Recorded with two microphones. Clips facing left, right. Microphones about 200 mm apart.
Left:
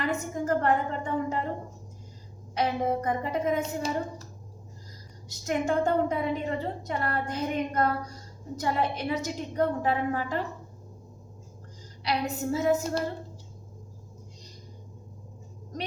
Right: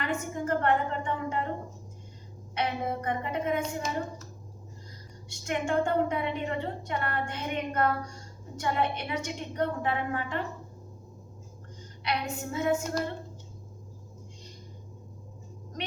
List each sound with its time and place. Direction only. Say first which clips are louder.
0.0 s a sound: left 2 dB; 40° left (ahead or behind)
2.6 s a woman's voice: left 4 dB; 40° left (ahead or behind)
5.3 s a woman's voice: left 2 dB; 40° left (ahead or behind)
12.0 s a woman's voice: left 4 dB; 35° left (ahead or behind)